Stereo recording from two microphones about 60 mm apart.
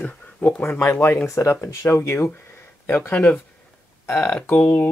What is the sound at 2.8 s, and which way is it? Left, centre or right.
Speech, left.